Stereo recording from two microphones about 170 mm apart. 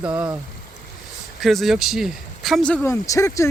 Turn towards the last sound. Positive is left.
turn(degrees=15)  # may be behind; listen again after turning